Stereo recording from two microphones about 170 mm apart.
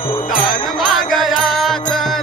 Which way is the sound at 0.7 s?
Centre (ahead or behind).